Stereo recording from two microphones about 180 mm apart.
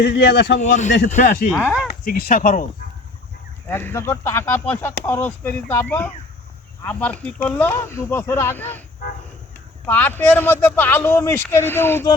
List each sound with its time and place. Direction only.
0.0 s a man's voice: 70° left (ahead or behind)
0.6 s speech: 45° left (ahead or behind)
3.7 s speech: 10° left (ahead or behind)
9.8 s speech: 10° left (ahead or behind)